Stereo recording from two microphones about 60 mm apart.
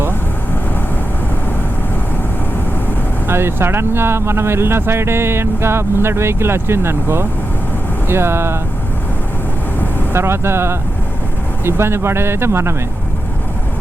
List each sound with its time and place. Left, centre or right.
3.2 s speech: right
10.1 s speech: right